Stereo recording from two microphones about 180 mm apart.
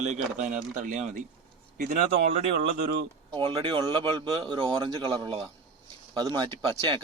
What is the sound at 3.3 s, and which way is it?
Speech, 25° right (ahead or behind).